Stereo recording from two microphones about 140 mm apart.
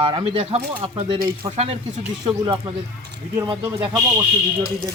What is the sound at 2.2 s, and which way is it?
Speech, 35° right (ahead or behind).